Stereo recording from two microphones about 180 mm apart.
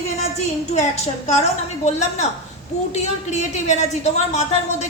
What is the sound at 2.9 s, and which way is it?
A woman's voice, 40° left (ahead or behind).